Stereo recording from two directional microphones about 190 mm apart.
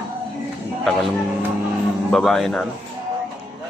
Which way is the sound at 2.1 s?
5° left (ahead or behind).